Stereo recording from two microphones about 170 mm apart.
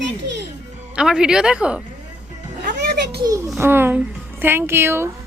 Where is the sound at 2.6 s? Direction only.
65° right (ahead or behind).